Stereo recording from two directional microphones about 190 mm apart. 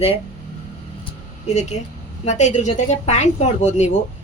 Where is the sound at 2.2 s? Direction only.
35° left (ahead or behind).